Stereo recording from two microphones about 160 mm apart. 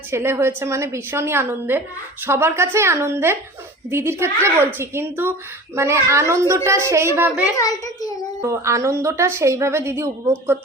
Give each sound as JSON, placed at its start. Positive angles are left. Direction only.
{"t": 0.1, "sound": "a woman's voice", "side_deg": -15}
{"t": 7.5, "sound": "a child's voice", "side_deg": 20}
{"t": 8.4, "sound": "a woman's voice", "side_deg": -20}